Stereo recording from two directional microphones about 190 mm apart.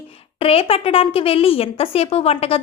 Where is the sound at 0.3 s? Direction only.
30° left (ahead or behind).